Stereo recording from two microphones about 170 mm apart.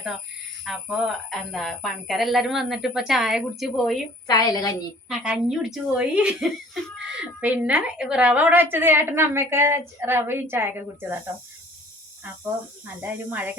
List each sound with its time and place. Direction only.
0.6 s a woman's voice: centre (ahead or behind)
4.3 s a woman's voice: 20° left (ahead or behind)
5.0 s a woman's voice: 5° right (ahead or behind)
13.0 s a woman's voice: 10° right (ahead or behind)